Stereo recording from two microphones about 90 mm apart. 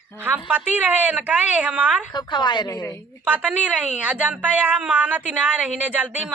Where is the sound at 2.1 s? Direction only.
55° left (ahead or behind).